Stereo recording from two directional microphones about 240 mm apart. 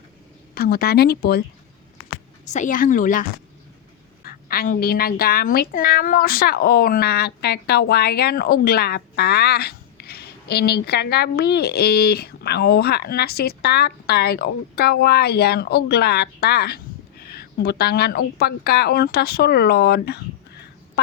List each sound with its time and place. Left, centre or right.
0.5 s a woman's voice: left
2.4 s a woman's voice: left